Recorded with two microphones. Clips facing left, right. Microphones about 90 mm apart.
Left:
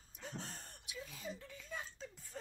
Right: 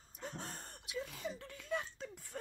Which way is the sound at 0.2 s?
50° right (ahead or behind).